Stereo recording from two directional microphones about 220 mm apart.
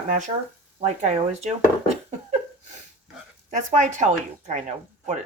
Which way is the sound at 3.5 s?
35° right (ahead or behind).